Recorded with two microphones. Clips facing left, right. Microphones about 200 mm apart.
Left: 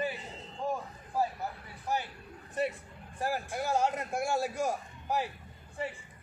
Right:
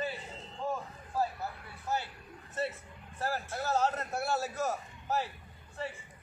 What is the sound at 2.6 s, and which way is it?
A man's voice, 15° left (ahead or behind).